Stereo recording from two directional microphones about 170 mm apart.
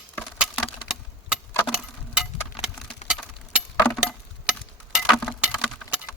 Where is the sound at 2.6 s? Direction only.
35° left (ahead or behind).